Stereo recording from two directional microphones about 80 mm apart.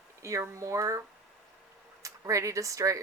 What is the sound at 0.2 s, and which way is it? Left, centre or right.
Speech, right.